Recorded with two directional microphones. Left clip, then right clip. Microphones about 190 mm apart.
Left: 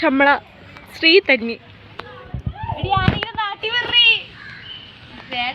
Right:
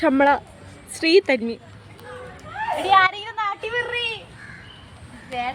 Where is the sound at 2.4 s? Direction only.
15° right (ahead or behind).